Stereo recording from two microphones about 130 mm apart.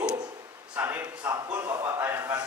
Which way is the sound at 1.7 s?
25° right (ahead or behind).